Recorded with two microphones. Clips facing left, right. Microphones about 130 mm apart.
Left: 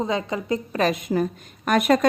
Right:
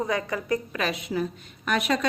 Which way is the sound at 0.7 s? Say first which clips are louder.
Left 6 dB; 45° left (ahead or behind).